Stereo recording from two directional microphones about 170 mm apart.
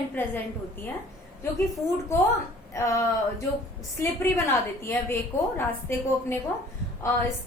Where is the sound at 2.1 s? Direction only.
15° left (ahead or behind).